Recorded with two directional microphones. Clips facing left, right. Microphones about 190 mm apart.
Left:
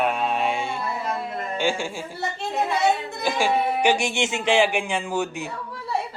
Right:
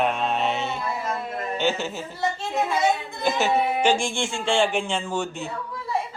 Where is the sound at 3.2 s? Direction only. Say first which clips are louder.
Right 3 dB; 10° left (ahead or behind).